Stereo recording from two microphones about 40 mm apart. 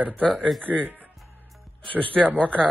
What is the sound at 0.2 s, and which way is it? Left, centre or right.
Speech, left.